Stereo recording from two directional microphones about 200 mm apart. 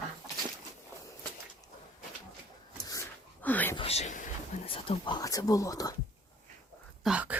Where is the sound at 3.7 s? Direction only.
30° left (ahead or behind).